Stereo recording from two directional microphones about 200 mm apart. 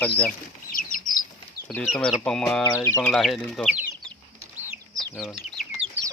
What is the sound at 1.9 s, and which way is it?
Speech, 5° left (ahead or behind).